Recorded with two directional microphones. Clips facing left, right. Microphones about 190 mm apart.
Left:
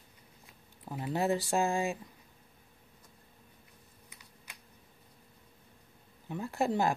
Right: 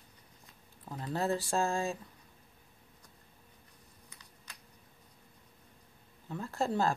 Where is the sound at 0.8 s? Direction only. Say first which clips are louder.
Left 2 dB; 15° left (ahead or behind).